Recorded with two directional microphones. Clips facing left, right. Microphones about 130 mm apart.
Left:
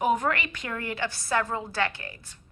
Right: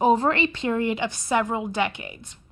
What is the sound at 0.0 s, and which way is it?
A woman's voice, 30° right (ahead or behind).